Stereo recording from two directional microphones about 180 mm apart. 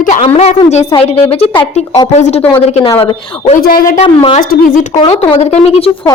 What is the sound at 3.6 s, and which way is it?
Speech, 55° left (ahead or behind).